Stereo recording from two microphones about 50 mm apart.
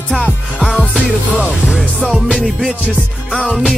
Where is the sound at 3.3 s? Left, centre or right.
Centre.